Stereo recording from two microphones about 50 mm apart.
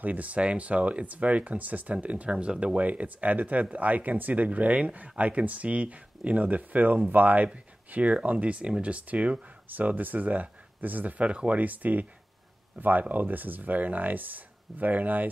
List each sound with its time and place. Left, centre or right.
0.0 s speech: right